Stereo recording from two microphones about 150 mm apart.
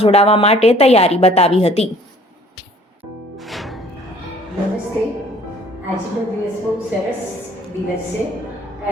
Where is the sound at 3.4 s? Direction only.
Centre (ahead or behind).